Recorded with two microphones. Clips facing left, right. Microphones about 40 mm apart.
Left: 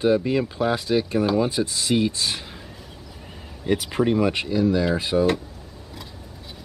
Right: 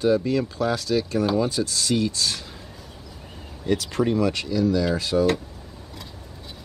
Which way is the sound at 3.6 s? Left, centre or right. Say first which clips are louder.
Left 1 dB; centre.